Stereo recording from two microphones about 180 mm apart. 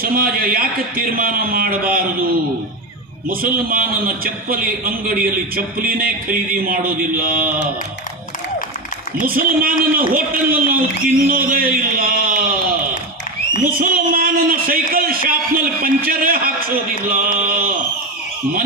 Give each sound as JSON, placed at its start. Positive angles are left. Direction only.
{"t": 0.0, "sound": "a man's voice", "side_deg": -55}
{"t": 3.2, "sound": "a man's voice", "side_deg": -50}
{"t": 9.2, "sound": "a man's voice", "side_deg": -55}